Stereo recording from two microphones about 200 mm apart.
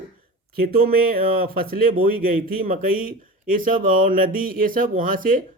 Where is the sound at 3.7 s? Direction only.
45° right (ahead or behind).